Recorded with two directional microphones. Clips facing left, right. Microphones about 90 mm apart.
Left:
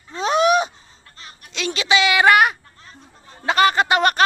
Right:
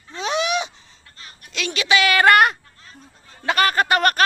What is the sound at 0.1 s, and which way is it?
Gasp, 40° left (ahead or behind).